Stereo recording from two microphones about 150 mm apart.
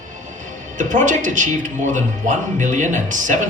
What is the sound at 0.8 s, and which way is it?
Speech, 60° right (ahead or behind).